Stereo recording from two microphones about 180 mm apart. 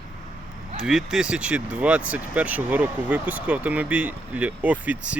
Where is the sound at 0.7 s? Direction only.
5° right (ahead or behind).